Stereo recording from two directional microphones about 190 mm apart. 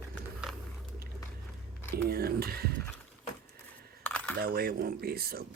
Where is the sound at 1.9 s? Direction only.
55° right (ahead or behind).